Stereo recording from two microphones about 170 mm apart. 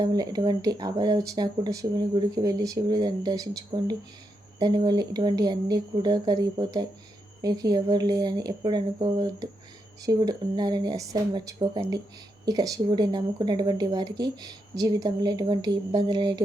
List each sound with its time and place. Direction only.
0.0 s speech: 25° right (ahead or behind)